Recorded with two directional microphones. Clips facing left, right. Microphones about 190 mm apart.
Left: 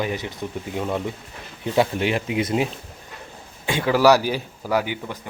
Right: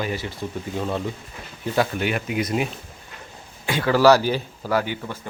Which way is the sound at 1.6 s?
25° left (ahead or behind).